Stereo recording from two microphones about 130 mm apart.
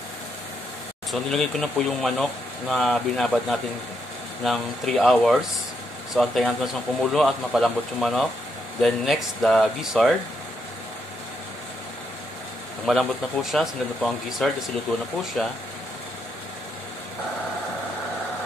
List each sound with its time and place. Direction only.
1.1 s speech: centre (ahead or behind)
12.8 s speech: centre (ahead or behind)